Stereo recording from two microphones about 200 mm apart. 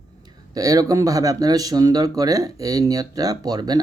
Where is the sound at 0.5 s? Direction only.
15° right (ahead or behind).